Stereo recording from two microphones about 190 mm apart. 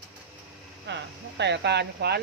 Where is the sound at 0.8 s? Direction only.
65° right (ahead or behind).